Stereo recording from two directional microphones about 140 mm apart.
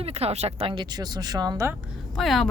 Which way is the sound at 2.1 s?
Centre (ahead or behind).